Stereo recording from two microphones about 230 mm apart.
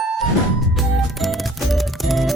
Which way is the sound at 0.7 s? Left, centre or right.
Centre.